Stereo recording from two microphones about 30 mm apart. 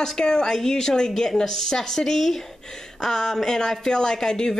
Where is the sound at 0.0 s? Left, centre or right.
Left.